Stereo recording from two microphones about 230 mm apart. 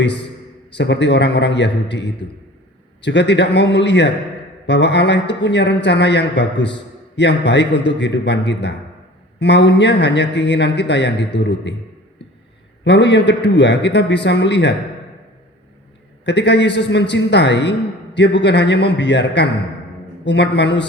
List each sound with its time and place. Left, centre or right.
0.0 s a man's voice: left
12.8 s a man's voice: left
16.2 s a man's voice: left